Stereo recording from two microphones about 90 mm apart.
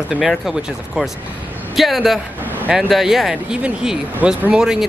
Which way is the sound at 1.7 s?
Centre (ahead or behind).